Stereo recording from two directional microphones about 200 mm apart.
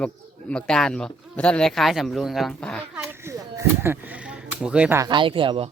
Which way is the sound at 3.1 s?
15° right (ahead or behind).